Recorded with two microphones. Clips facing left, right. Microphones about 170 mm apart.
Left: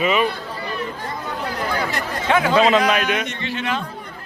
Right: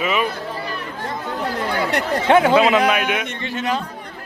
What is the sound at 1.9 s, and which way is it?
Speech, 55° right (ahead or behind).